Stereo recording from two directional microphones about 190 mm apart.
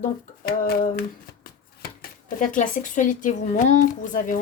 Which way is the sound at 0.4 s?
50° left (ahead or behind).